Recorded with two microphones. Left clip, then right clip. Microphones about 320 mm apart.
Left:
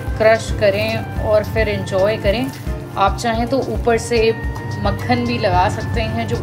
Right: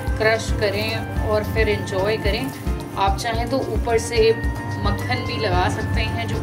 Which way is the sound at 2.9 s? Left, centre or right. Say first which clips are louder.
Left 5 dB; centre.